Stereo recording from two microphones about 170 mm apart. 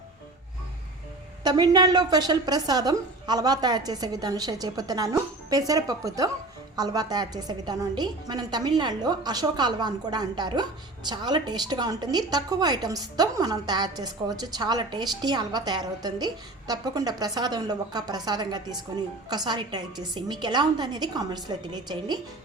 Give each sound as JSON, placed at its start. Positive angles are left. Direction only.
{"t": 1.5, "sound": "a woman's voice", "side_deg": -25}